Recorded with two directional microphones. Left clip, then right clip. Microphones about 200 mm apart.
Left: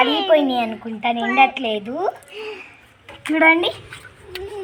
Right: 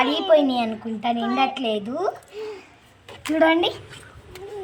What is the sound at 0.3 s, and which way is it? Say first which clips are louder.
Speech: left 1 dB; 25° right (ahead or behind).